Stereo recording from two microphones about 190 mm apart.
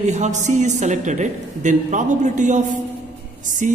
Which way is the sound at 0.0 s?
40° right (ahead or behind).